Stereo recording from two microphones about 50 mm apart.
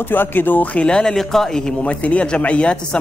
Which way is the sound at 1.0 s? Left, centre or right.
Centre.